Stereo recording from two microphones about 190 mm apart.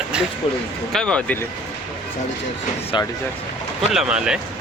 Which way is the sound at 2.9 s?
25° left (ahead or behind).